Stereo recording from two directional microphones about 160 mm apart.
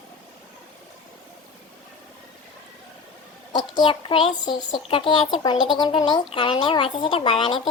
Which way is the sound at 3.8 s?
30° left (ahead or behind).